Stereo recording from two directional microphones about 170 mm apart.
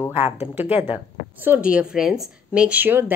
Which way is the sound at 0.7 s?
35° left (ahead or behind).